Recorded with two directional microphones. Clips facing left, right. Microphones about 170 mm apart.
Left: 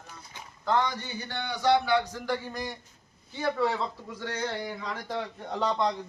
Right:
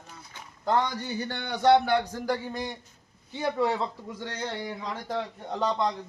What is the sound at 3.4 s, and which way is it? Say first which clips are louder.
Speech: right 1 dB; 15° right (ahead or behind).